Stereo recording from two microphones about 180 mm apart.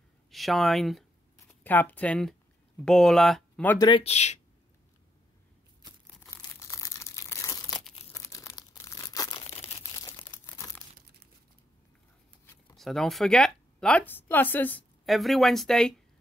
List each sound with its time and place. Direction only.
0.3 s speech: centre (ahead or behind)
3.7 s speech: 25° left (ahead or behind)
4.0 s speech: 35° left (ahead or behind)
6.2 s a sound: 15° left (ahead or behind)
8.1 s crumpling: 15° left (ahead or behind)
12.7 s speech: centre (ahead or behind)